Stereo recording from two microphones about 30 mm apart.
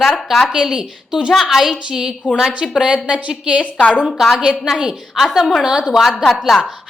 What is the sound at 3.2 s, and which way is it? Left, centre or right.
Speech, right.